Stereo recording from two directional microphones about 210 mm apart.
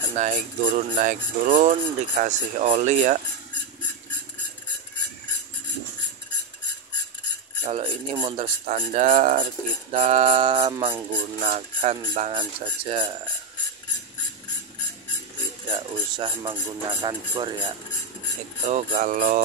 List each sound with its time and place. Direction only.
0.1 s speech: 35° right (ahead or behind)
7.6 s mantra: 25° right (ahead or behind)
8.7 s speech: 40° right (ahead or behind)
9.9 s mantra: 30° right (ahead or behind)
11.4 s speech: 35° right (ahead or behind)
12.2 s mantra: 25° right (ahead or behind)
15.7 s speech: 20° right (ahead or behind)
18.7 s speech: 30° right (ahead or behind)
18.9 s speech: 40° right (ahead or behind)